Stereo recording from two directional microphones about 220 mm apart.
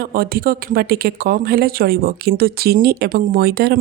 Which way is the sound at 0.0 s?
40° right (ahead or behind).